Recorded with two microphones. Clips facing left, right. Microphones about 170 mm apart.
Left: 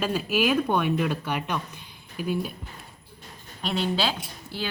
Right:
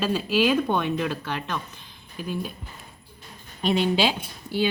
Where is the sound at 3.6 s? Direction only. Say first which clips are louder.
Right 4 dB; 15° right (ahead or behind).